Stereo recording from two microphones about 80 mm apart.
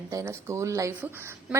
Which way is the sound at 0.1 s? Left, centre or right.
Right.